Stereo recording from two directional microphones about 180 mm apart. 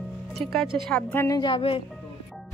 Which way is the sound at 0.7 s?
5° left (ahead or behind).